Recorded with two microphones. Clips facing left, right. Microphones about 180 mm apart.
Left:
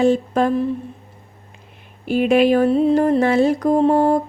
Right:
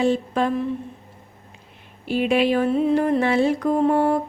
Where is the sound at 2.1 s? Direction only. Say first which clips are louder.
Left 5 dB; 50° left (ahead or behind).